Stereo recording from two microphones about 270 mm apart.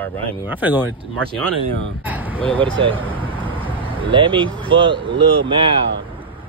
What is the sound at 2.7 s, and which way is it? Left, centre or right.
Speech, centre.